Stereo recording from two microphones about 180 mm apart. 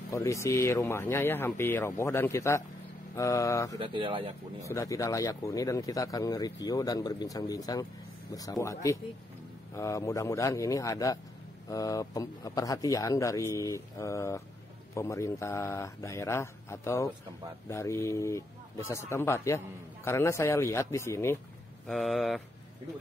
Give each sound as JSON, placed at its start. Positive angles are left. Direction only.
{"t": 0.1, "sound": "speech", "side_deg": 15}
{"t": 3.7, "sound": "speech", "side_deg": -30}
{"t": 4.6, "sound": "speech", "side_deg": 20}
{"t": 21.8, "sound": "speech", "side_deg": 0}